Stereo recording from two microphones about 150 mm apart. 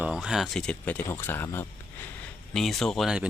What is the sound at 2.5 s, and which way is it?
Speech, centre (ahead or behind).